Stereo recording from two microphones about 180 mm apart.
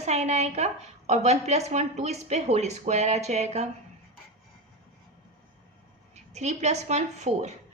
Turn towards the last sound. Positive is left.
turn(degrees=-40)  # may be behind; listen again after turning